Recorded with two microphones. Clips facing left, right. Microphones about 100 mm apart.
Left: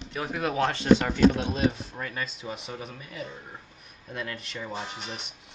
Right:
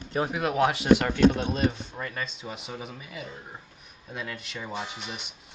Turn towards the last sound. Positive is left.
turn(degrees=0)  # may be behind; listen again after turning